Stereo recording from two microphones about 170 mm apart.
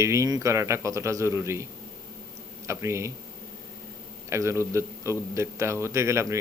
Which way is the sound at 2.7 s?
15° right (ahead or behind).